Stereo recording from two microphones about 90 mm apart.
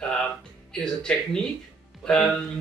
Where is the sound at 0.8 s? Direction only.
10° left (ahead or behind).